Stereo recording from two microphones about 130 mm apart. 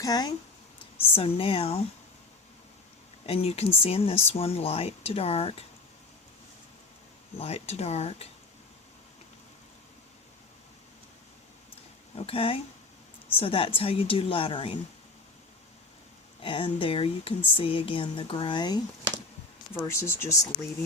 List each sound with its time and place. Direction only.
0.0 s speech: 30° left (ahead or behind)
0.9 s speech: 45° left (ahead or behind)
3.2 s speech: 50° left (ahead or behind)
7.3 s speech: 50° left (ahead or behind)
12.1 s speech: 45° left (ahead or behind)
16.4 s speech: 40° left (ahead or behind)
19.7 s speech: 20° left (ahead or behind)